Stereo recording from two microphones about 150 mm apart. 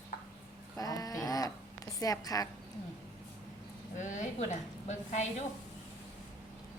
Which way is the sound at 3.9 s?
55° left (ahead or behind).